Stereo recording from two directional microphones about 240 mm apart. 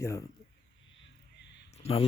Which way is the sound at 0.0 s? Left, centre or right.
Centre.